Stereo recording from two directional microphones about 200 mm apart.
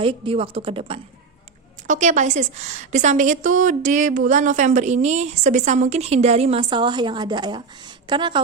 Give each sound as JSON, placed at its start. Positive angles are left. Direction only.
{"t": 0.0, "sound": "a woman's voice", "side_deg": -25}